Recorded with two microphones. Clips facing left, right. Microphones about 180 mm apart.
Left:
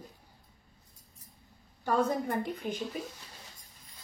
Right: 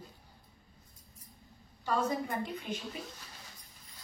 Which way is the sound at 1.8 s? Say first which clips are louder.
Left 3 dB; 55° left (ahead or behind).